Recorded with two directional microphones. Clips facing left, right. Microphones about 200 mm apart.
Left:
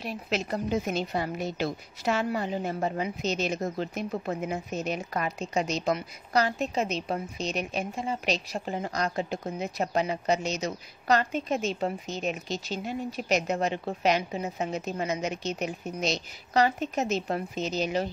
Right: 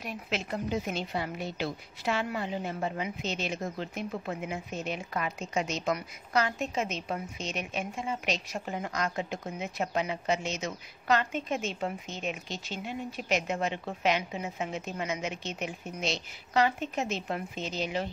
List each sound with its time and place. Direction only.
0.0 s a woman's voice: 35° left (ahead or behind)